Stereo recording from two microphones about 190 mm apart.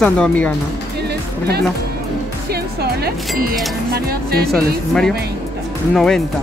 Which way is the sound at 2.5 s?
55° right (ahead or behind).